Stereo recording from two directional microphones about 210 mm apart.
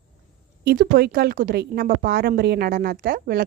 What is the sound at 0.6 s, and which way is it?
Speech, 50° right (ahead or behind).